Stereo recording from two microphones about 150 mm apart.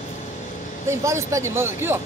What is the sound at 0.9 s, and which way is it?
Speech, 20° right (ahead or behind).